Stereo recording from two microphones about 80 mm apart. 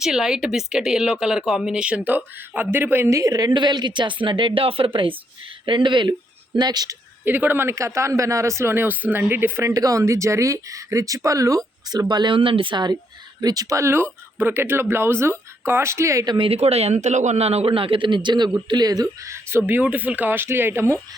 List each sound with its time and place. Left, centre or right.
0.0 s a woman's voice: centre; by 3.1 s right
3.1 s a woman's voice: right
6.6 s speech: right
7.3 s speech: right
9.7 s speech: right
13.4 s speech: right
16.2 s a woman's voice: right
17.9 s a woman's voice: right
18.7 s speech: right
19.2 s speech: right